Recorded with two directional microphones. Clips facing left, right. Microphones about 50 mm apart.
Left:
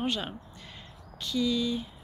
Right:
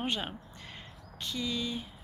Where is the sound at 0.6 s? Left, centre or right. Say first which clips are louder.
Even; right.